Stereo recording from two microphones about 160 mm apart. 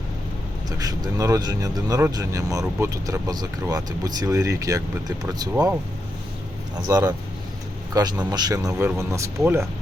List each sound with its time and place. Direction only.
0.8 s speech: 25° right (ahead or behind)
6.8 s speech: 20° right (ahead or behind)